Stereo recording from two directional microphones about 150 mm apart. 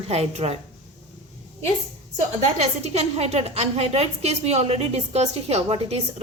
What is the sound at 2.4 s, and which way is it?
A woman's voice, 50° right (ahead or behind).